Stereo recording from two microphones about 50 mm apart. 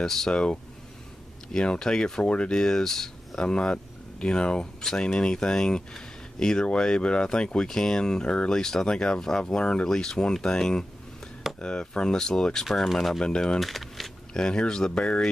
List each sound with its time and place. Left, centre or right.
0.0 s speech: centre
12.6 s speech: centre
13.2 s speech: centre
13.6 s a sound: centre
14.3 s speech: centre